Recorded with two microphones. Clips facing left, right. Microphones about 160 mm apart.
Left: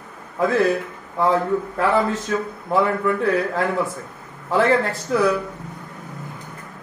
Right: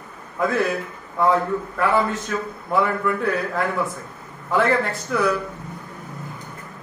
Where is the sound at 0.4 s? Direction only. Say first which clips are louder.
Left 3 dB; 25° left (ahead or behind).